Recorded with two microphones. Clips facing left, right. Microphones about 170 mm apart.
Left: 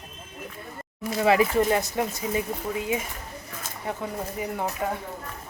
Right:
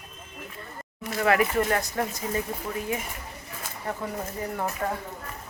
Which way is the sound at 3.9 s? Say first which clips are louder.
Left 1 dB; 15° left (ahead or behind).